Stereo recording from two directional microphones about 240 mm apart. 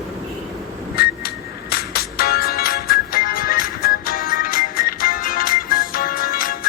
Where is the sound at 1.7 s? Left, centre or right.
Left.